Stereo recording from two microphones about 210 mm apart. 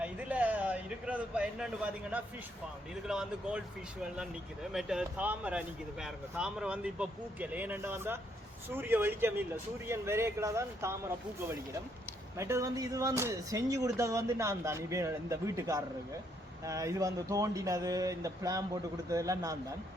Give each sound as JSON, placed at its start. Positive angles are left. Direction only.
{"t": 0.0, "sound": "a sound", "side_deg": -5}
{"t": 3.1, "sound": "speech", "side_deg": -5}
{"t": 4.7, "sound": "speech", "side_deg": 0}
{"t": 12.4, "sound": "speech", "side_deg": -15}